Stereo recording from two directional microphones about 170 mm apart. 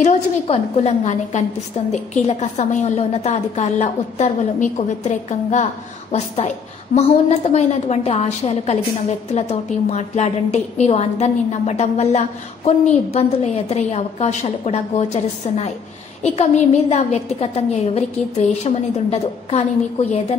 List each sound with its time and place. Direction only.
0.0 s a woman's voice: 40° left (ahead or behind)